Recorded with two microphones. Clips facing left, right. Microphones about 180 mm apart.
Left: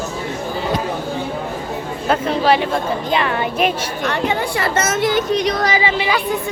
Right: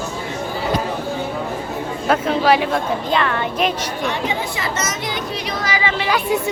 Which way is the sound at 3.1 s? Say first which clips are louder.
Left 1 dB; 10° left (ahead or behind).